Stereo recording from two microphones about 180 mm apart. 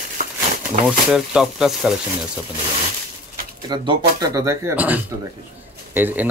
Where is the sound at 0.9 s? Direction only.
5° right (ahead or behind).